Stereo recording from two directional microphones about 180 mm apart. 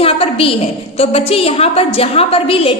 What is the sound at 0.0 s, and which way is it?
A woman's voice, 30° left (ahead or behind).